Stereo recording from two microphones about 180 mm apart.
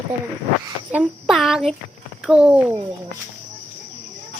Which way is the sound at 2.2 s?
5° right (ahead or behind).